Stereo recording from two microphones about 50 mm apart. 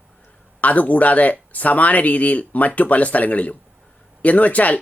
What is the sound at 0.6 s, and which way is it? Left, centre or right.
Speech, left.